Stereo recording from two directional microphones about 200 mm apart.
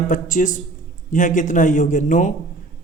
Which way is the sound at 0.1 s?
40° left (ahead or behind).